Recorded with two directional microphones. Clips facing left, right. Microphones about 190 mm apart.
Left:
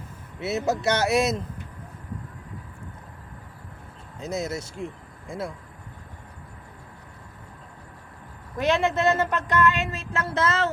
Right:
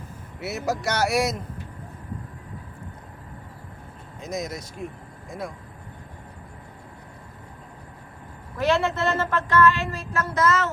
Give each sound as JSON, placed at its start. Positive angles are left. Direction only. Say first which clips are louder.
{"t": 0.3, "sound": "a woman's voice", "louder": "left 2 dB", "side_deg": 25}
{"t": 4.4, "sound": "a woman's voice", "louder": "left 1 dB", "side_deg": 25}
{"t": 8.5, "sound": "a woman's voice", "louder": "even", "side_deg": 20}